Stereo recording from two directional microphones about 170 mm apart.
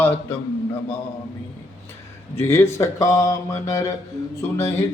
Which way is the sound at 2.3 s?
15° left (ahead or behind).